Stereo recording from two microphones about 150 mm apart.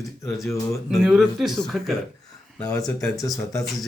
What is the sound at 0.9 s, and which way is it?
Speech, centre (ahead or behind).